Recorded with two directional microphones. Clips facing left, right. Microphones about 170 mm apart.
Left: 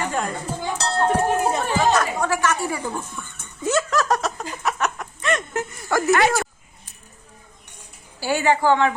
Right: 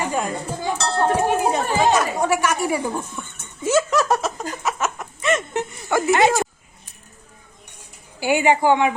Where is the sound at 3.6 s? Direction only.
5° right (ahead or behind).